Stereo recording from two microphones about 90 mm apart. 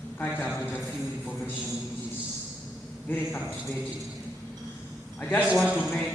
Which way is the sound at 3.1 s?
25° left (ahead or behind).